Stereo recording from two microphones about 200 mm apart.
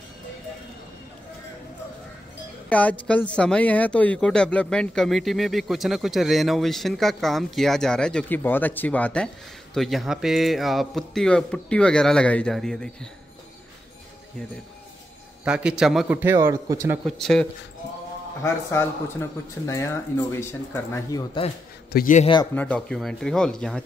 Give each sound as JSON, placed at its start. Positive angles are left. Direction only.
{"t": 2.7, "sound": "speech", "side_deg": 5}
{"t": 15.4, "sound": "a man's voice", "side_deg": -5}
{"t": 17.0, "sound": "speech", "side_deg": 0}
{"t": 18.4, "sound": "speech", "side_deg": 10}
{"t": 21.9, "sound": "a man's voice", "side_deg": 40}
{"t": 22.3, "sound": "speech", "side_deg": 20}
{"t": 22.6, "sound": "speech", "side_deg": 5}